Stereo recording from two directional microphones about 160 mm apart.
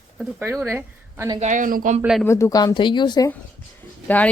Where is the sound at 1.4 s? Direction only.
50° right (ahead or behind).